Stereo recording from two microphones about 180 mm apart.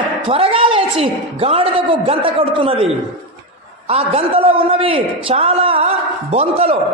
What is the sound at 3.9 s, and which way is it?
A man's voice, 35° right (ahead or behind).